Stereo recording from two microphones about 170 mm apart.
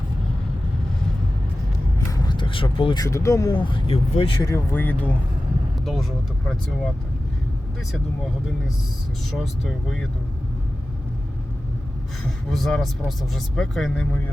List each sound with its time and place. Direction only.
2.0 s speech: 25° left (ahead or behind)
4.4 s speech: 15° left (ahead or behind)
12.5 s speech: centre (ahead or behind)